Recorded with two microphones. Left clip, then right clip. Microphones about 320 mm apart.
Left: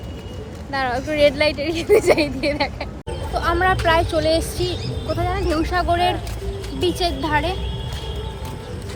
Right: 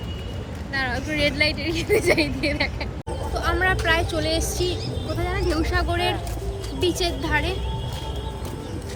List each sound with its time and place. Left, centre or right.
0.7 s a woman's voice: centre
3.3 s speech: centre